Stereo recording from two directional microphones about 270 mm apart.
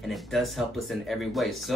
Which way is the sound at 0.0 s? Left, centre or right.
Centre.